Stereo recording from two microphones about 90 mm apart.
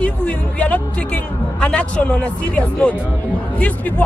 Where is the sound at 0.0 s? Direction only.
15° left (ahead or behind).